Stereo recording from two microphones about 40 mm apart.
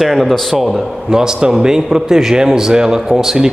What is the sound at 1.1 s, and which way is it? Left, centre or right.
A man's voice, centre.